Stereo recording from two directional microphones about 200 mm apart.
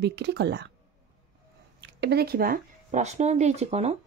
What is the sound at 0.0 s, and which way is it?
Speech, 55° right (ahead or behind).